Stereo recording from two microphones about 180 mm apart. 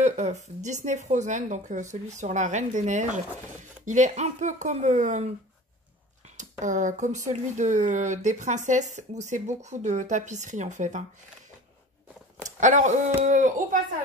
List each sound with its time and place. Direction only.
0.0 s a woman's voice: 40° right (ahead or behind)
6.3 s speech: 45° right (ahead or behind)
12.5 s speech: 45° right (ahead or behind)